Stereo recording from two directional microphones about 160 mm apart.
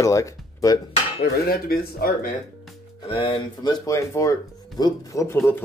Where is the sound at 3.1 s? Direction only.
35° left (ahead or behind).